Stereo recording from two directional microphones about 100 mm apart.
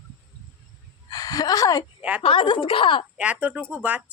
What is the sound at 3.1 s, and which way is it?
Speech, 15° right (ahead or behind).